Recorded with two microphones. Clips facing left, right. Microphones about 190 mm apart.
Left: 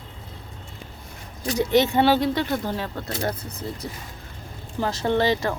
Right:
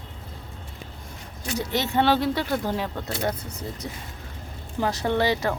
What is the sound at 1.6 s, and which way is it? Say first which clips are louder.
Speech: left 7 dB; 20° left (ahead or behind).